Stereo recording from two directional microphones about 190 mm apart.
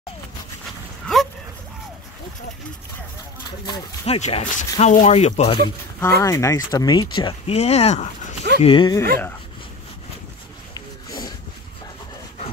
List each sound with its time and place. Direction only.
3.6 s speech: 25° left (ahead or behind)
5.9 s speech: 15° left (ahead or behind)
10.7 s a sound: 20° left (ahead or behind)